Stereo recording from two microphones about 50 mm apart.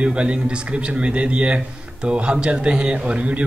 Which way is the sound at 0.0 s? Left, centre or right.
Right.